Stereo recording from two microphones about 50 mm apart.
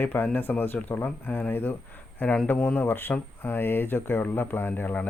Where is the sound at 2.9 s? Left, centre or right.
Left.